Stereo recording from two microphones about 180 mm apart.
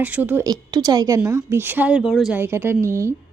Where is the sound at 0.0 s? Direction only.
10° right (ahead or behind).